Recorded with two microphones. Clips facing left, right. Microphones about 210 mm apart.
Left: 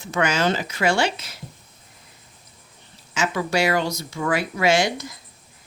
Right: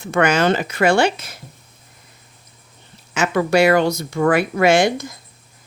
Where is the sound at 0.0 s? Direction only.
60° right (ahead or behind).